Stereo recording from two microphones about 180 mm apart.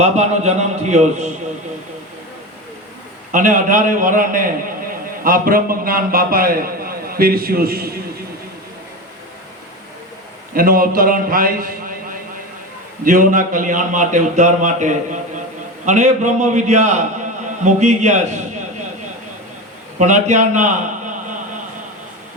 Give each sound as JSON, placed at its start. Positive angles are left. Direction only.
{"t": 0.0, "sound": "a man's voice", "side_deg": -40}
{"t": 3.3, "sound": "a man's voice", "side_deg": -45}
{"t": 10.5, "sound": "a man's voice", "side_deg": -55}
{"t": 13.1, "sound": "a man's voice", "side_deg": -45}
{"t": 20.0, "sound": "a man's voice", "side_deg": -40}